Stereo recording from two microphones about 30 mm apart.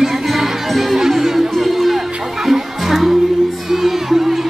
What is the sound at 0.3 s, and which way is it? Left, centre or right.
Music, centre.